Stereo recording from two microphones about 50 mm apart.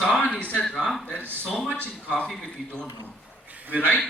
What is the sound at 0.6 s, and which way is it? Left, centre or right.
Speech, centre.